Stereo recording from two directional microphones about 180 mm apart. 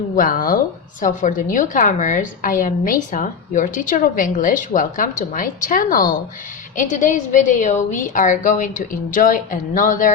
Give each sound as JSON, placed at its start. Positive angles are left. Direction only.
{"t": 0.2, "sound": "a woman's voice", "side_deg": 50}